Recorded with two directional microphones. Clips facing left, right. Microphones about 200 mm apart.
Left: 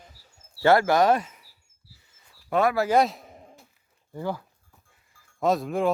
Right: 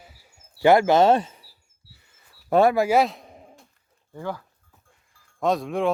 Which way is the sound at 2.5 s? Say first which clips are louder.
Right 5 dB; 30° right (ahead or behind).